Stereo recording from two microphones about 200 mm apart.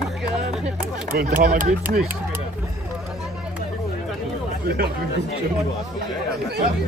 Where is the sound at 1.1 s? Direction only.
40° right (ahead or behind).